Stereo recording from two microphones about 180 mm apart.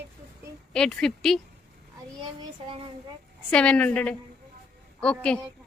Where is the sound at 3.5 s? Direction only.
5° left (ahead or behind).